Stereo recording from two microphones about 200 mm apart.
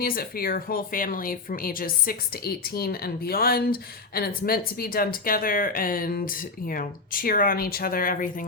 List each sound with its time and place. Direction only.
0.0 s speech: 45° left (ahead or behind)